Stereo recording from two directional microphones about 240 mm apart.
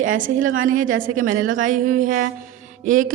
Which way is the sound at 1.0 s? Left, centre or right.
Right.